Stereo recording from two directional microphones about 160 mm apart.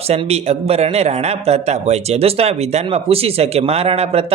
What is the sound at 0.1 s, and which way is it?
A man's voice, 40° right (ahead or behind).